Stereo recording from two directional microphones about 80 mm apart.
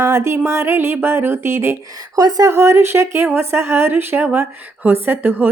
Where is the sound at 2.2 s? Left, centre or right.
Right.